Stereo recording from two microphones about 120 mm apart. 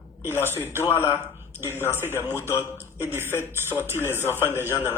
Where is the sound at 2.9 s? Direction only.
20° right (ahead or behind).